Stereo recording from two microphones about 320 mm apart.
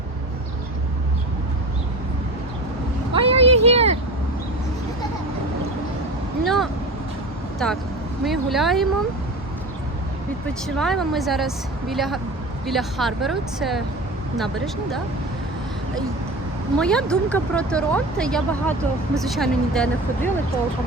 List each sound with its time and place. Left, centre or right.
3.1 s vehicle: centre
6.4 s vehicle: centre
7.6 s speech: centre
10.8 s speech: centre
16.7 s speech: centre